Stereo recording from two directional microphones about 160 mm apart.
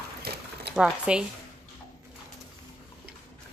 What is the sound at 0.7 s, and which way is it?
Speech, 5° right (ahead or behind).